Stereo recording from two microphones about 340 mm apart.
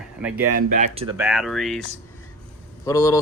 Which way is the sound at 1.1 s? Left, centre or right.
Centre.